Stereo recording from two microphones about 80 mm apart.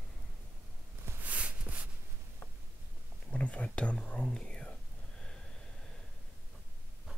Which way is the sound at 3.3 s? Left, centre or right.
Centre.